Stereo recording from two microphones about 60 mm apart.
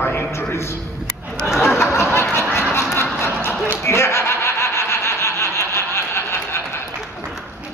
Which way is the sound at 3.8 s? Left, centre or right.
Left.